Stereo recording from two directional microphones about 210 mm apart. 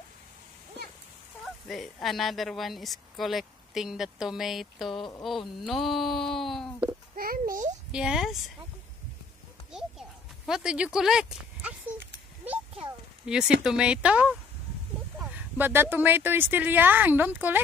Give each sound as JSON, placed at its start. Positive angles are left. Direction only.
{"t": 1.4, "sound": "speech", "side_deg": 0}
{"t": 7.2, "sound": "a child's voice", "side_deg": -45}
{"t": 7.9, "sound": "speech", "side_deg": -5}
{"t": 9.7, "sound": "a sound", "side_deg": 0}
{"t": 13.2, "sound": "speech", "side_deg": -5}